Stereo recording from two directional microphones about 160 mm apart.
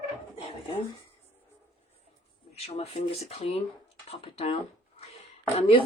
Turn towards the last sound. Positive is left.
turn(degrees=35)  # may be behind; listen again after turning